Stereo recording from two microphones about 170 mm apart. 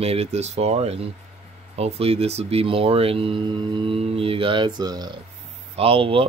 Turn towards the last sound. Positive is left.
turn(degrees=-35)  # may be behind; listen again after turning